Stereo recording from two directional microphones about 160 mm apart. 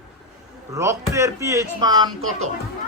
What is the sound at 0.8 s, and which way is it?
Speech, 20° right (ahead or behind).